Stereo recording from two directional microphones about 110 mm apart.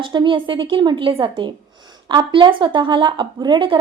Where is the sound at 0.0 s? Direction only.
45° right (ahead or behind).